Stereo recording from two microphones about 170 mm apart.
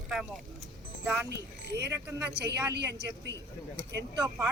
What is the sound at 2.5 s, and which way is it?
Speech, 80° right.